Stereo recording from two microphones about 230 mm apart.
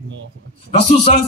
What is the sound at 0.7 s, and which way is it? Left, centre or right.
Speech, left.